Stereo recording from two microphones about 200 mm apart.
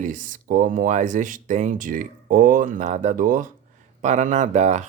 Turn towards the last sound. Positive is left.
turn(degrees=-35)  # may be behind; listen again after turning